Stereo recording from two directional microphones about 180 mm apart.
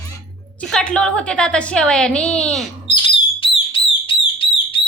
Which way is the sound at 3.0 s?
30° left (ahead or behind).